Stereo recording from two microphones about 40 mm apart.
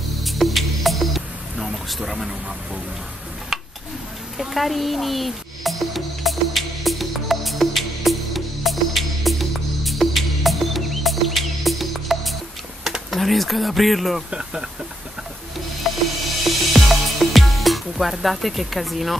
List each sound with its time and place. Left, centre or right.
0.2 s music: centre
4.4 s music: centre
12.8 s typing: centre
13.2 s speech: centre
14.3 s speech: right
15.8 s music: centre